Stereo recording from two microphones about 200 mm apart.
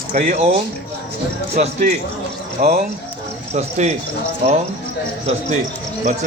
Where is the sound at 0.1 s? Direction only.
35° right (ahead or behind).